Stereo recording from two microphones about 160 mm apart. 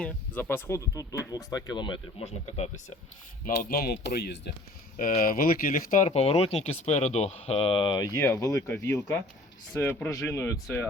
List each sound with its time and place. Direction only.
0.0 s speech: 10° left (ahead or behind); by 2.2 s 30° left (ahead or behind)
2.2 s speech: 45° left (ahead or behind)
3.4 s speech: 65° left (ahead or behind); by 4.5 s 90° left
5.2 s speech: 65° left (ahead or behind); by 10.8 s 15° left (ahead or behind)